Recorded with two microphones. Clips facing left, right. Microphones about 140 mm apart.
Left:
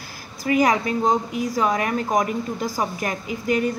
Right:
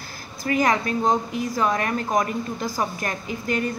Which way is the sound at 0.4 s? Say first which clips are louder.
Left 2 dB; 10° left (ahead or behind).